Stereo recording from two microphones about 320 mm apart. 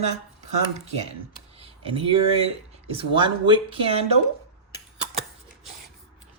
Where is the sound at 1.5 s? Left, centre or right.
Centre.